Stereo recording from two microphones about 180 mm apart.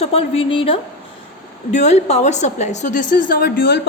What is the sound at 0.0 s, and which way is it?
A woman's voice, 35° left (ahead or behind).